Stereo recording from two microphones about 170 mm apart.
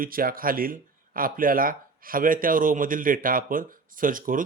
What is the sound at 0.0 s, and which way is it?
A man's voice, 60° right (ahead or behind).